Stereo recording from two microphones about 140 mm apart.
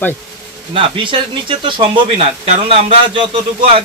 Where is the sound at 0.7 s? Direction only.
40° right (ahead or behind).